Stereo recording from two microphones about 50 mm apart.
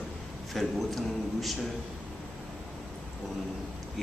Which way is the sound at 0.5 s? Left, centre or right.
Centre.